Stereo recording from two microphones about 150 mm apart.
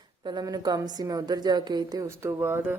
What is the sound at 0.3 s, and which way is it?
Speech, 25° right (ahead or behind).